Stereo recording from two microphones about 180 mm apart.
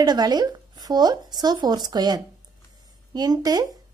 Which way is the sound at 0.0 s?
25° right (ahead or behind).